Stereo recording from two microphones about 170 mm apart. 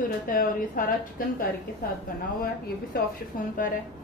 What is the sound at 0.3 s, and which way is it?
Speech, 55° left (ahead or behind).